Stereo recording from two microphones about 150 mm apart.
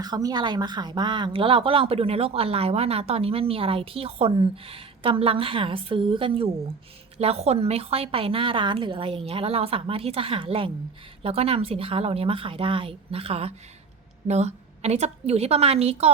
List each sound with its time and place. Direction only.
0.0 s a woman's voice: 25° right (ahead or behind); by 16.1 s 45° right (ahead or behind)